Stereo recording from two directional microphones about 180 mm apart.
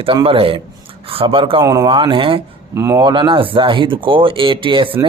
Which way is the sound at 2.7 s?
15° right (ahead or behind).